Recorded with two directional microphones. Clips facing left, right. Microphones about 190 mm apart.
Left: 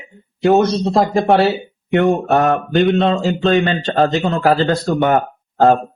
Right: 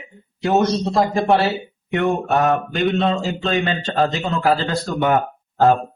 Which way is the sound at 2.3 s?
50° left (ahead or behind).